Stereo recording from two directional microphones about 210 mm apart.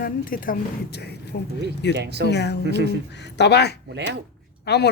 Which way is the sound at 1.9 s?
55° right (ahead or behind).